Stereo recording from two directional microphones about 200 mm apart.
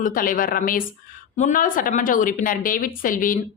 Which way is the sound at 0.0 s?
45° left (ahead or behind).